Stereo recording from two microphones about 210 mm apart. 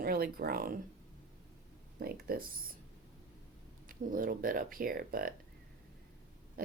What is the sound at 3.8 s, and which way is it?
Speech, 40° right (ahead or behind).